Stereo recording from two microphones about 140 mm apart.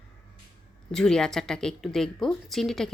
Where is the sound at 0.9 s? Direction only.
5° left (ahead or behind).